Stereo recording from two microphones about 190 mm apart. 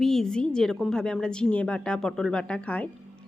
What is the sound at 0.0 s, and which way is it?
A woman's voice, centre (ahead or behind).